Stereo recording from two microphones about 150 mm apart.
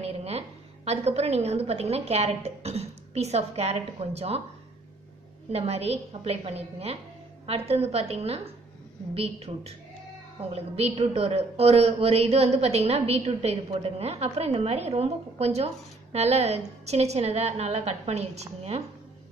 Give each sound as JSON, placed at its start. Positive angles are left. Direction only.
{"t": 0.0, "sound": "a woman's voice", "side_deg": -45}
{"t": 5.5, "sound": "a woman's voice", "side_deg": -40}